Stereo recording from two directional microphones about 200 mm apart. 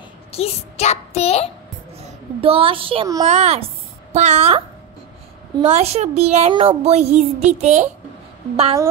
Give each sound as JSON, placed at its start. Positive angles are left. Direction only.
{"t": 0.3, "sound": "a child's voice", "side_deg": 30}
{"t": 2.0, "sound": "a child's voice", "side_deg": -30}
{"t": 5.7, "sound": "speech", "side_deg": -30}